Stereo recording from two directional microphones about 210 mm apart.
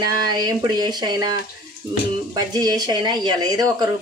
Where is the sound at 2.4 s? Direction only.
20° right (ahead or behind).